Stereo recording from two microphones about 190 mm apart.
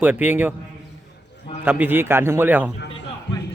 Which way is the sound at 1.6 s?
10° right (ahead or behind).